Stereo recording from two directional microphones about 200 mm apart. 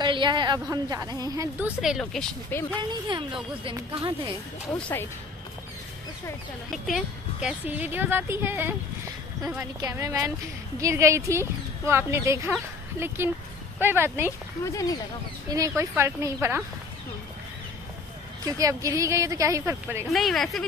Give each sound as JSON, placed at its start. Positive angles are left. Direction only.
{"t": 0.0, "sound": "a woman's voice", "side_deg": -25}
{"t": 1.8, "sound": "speech", "side_deg": 0}
{"t": 2.8, "sound": "a woman's voice", "side_deg": -20}
{"t": 4.7, "sound": "speech", "side_deg": 5}
{"t": 7.4, "sound": "speech", "side_deg": -10}
{"t": 13.7, "sound": "speech", "side_deg": -10}
{"t": 14.6, "sound": "speech", "side_deg": 15}
{"t": 15.5, "sound": "speech", "side_deg": -15}
{"t": 18.4, "sound": "speech", "side_deg": -15}
{"t": 20.1, "sound": "speech", "side_deg": 0}